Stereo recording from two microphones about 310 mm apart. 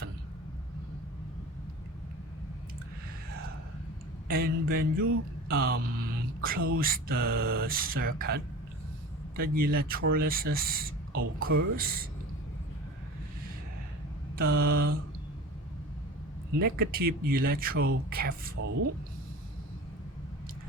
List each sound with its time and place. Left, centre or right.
4.3 s speech: right
11.2 s speech: right
11.8 s speech: right
14.3 s speech: right
16.6 s speech: right